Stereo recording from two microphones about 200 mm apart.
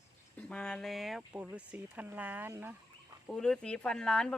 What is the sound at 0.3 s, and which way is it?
Speech, 5° left (ahead or behind).